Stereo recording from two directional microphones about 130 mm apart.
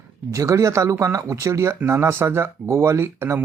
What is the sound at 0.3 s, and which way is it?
Speech, 25° right (ahead or behind).